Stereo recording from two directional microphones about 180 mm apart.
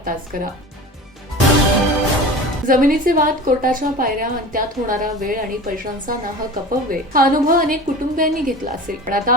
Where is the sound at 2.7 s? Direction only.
50° right (ahead or behind).